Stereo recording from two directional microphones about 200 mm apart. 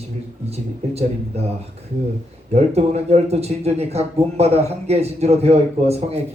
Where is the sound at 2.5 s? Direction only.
30° right (ahead or behind).